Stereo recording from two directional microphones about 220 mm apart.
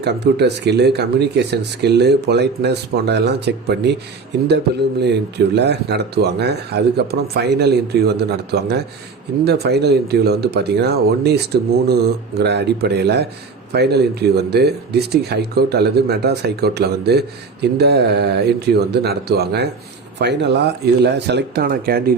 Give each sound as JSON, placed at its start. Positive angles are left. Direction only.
{"t": 0.0, "sound": "speech", "side_deg": -50}